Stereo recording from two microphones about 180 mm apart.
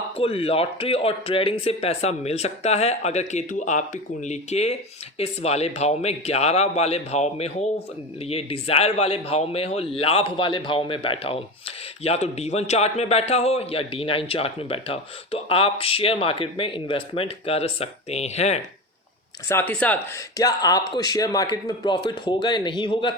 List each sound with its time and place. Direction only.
0.2 s a man's voice: 30° left (ahead or behind)
19.5 s speech: 10° left (ahead or behind)
20.4 s speech: 20° left (ahead or behind)